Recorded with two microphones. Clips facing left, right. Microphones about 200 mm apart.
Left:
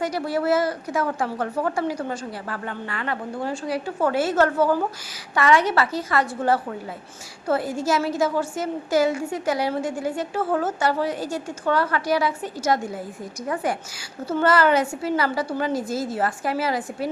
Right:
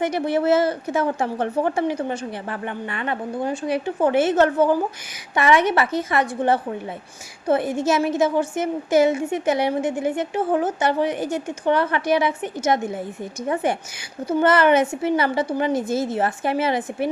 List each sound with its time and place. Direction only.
0.0 s a woman's voice: 20° right (ahead or behind)